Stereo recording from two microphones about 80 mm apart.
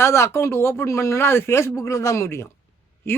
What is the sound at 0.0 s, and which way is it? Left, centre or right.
Speech, left.